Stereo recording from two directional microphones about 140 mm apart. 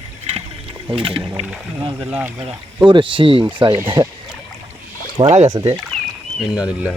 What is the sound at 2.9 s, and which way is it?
Speech, 35° right (ahead or behind).